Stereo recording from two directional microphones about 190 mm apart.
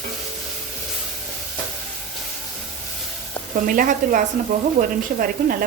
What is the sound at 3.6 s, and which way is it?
Speech, 45° right (ahead or behind).